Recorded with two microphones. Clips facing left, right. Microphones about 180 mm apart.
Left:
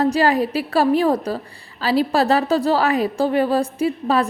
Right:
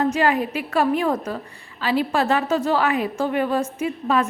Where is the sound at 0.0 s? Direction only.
35° left (ahead or behind).